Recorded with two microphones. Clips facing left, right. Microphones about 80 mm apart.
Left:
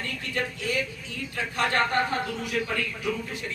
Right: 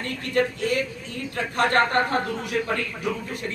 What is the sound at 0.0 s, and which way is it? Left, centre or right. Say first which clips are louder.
A man's voice: right 7 dB; right.